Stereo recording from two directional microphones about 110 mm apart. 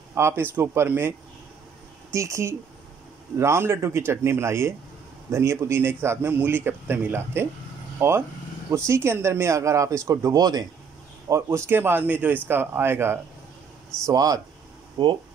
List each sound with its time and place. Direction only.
0.1 s a man's voice: 25° right (ahead or behind)
2.1 s a man's voice: 25° right (ahead or behind)
14.0 s speech: 35° right (ahead or behind)
15.0 s speech: 45° right (ahead or behind)